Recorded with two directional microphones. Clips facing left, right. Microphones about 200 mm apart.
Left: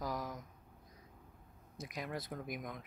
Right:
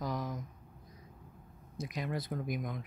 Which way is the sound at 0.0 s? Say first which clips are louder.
Right 3 dB; 5° left (ahead or behind).